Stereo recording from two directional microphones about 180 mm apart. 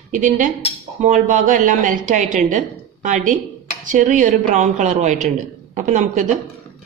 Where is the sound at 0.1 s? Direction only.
45° right (ahead or behind).